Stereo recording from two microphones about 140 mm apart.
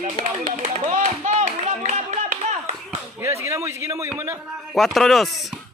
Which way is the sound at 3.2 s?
20° right (ahead or behind).